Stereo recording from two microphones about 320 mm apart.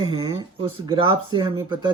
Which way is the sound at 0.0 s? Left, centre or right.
Centre.